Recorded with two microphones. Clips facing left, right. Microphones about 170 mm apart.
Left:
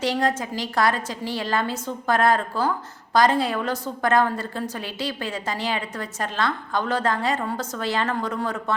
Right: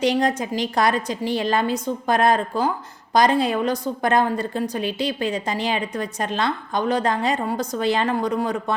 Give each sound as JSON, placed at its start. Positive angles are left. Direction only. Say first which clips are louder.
{"t": 0.0, "sound": "a woman's voice", "louder": "right 3 dB", "side_deg": -15}